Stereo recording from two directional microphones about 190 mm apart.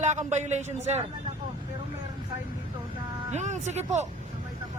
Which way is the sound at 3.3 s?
35° right (ahead or behind).